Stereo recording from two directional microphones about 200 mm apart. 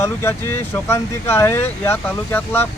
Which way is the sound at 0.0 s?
10° left (ahead or behind).